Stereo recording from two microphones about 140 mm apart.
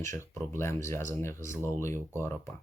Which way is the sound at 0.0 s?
20° left (ahead or behind).